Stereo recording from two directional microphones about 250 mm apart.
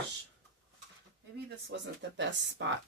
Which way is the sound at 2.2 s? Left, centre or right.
Right.